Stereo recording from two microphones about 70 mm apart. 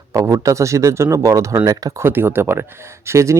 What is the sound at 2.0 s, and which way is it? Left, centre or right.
Speech, right.